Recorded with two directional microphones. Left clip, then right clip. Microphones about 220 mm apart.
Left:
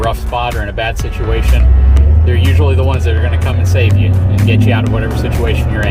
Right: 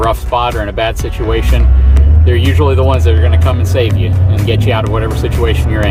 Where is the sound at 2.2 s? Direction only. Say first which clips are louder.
Right 4 dB; 15° right (ahead or behind).